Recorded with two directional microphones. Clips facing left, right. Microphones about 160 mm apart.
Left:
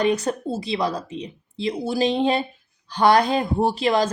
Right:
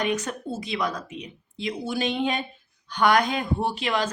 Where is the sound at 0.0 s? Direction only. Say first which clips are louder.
Left 6 dB; 35° left (ahead or behind).